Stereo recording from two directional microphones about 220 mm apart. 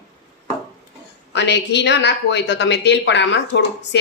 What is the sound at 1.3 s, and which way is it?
Speech, 50° left (ahead or behind).